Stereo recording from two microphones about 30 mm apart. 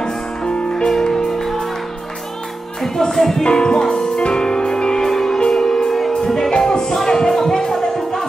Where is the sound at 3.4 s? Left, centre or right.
Left.